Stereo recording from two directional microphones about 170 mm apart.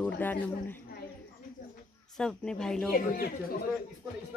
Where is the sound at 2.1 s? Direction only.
5° left (ahead or behind).